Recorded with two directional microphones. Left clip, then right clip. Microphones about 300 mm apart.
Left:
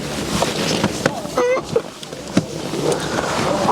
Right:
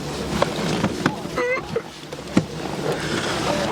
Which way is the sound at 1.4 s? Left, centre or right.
Centre.